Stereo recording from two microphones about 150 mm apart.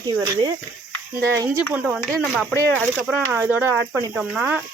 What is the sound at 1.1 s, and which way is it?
Speech, 15° right (ahead or behind).